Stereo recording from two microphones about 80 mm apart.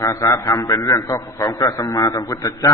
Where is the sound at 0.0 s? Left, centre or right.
Left.